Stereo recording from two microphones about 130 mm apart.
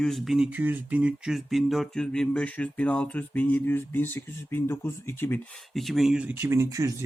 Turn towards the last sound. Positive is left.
turn(degrees=-25)  # may be behind; listen again after turning